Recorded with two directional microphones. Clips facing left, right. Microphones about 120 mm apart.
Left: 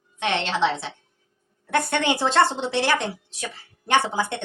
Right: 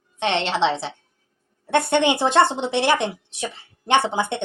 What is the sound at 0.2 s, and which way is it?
A woman's voice, 25° right (ahead or behind).